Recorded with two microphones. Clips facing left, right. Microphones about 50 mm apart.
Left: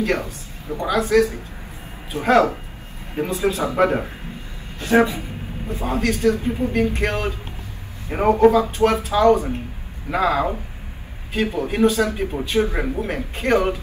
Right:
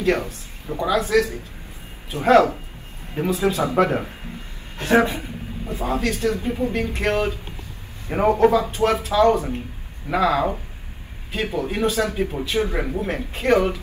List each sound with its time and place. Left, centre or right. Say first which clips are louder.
0.0 s speech: right 1 dB; left
3.6 s speech: left 2 dB; left
4.7 s speech: left 1 dB; right
5.7 s speech: left 1 dB; left